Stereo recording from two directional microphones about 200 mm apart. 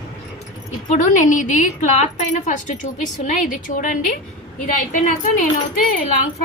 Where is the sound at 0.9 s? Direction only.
40° left (ahead or behind).